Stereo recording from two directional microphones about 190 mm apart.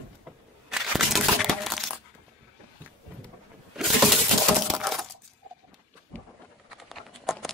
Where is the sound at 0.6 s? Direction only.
Centre (ahead or behind).